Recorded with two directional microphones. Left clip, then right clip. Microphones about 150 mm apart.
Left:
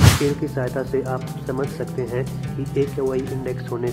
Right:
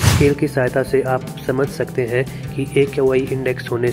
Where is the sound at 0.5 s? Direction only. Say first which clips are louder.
Right 7 dB; 35° right (ahead or behind).